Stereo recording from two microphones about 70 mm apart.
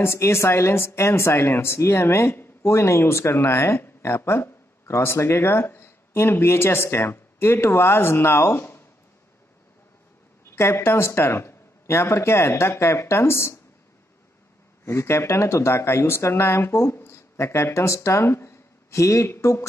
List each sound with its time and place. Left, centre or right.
0.0 s speech: left
10.5 s speech: left
14.9 s speech: left